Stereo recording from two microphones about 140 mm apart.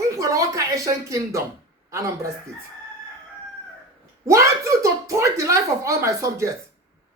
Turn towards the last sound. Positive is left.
turn(degrees=-20)  # may be behind; listen again after turning